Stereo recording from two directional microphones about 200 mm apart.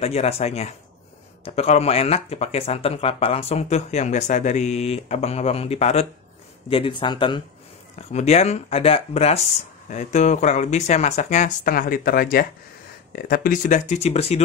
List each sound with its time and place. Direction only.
0.0 s speech: 30° left (ahead or behind)
8.1 s speech: 35° left (ahead or behind)